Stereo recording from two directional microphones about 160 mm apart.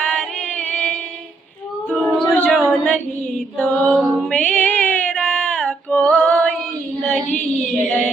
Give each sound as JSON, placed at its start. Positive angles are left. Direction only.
{"t": 0.0, "sound": "chant", "side_deg": 5}
{"t": 1.9, "sound": "a capella", "side_deg": 5}
{"t": 3.6, "sound": "female singing", "side_deg": 10}
{"t": 7.8, "sound": "female singing", "side_deg": 5}